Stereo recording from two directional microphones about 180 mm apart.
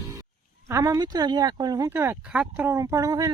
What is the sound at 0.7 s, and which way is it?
Speech, 15° right (ahead or behind).